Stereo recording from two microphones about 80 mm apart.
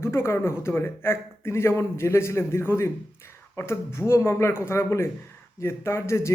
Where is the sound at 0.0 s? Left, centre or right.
Left.